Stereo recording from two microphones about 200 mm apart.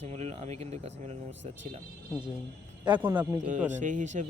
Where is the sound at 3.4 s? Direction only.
35° right (ahead or behind).